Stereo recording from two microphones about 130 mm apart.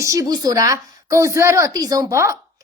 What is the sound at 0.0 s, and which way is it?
A woman's voice, 25° right (ahead or behind).